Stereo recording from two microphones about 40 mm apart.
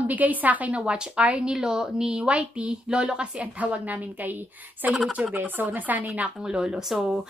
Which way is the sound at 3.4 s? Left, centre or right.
Right.